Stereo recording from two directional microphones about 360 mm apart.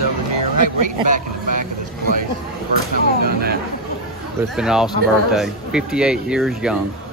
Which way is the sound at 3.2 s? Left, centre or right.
Right.